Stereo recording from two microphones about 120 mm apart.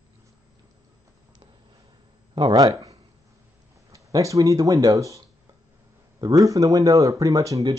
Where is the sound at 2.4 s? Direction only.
35° right (ahead or behind).